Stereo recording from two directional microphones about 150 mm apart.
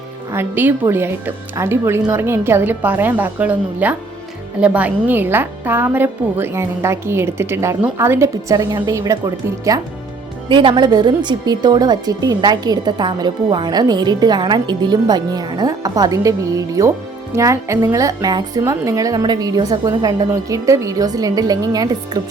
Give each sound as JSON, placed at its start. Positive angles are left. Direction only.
{"t": 0.3, "sound": "a woman's voice", "side_deg": -15}